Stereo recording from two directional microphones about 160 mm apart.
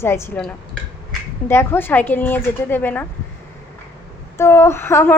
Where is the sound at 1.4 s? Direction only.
15° left (ahead or behind).